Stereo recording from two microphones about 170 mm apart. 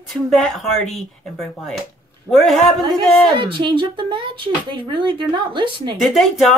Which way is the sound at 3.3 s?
30° right (ahead or behind).